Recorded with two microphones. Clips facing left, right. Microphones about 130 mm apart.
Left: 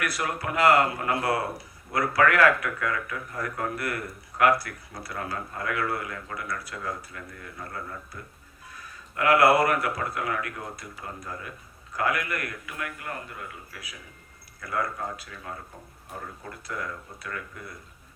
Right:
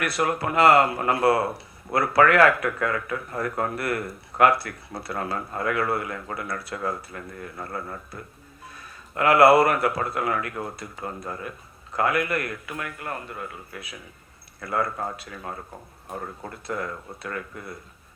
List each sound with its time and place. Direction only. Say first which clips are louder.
0.0 s a man's voice: right 5 dB; 25° right (ahead or behind)